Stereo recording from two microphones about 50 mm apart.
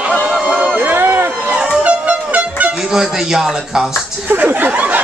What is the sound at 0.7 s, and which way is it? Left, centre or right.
Run, right.